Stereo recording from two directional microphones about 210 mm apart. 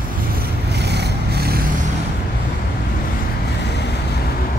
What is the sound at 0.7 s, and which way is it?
Vehicle, 55° right (ahead or behind).